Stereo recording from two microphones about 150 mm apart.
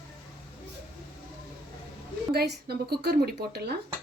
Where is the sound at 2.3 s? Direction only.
90° right.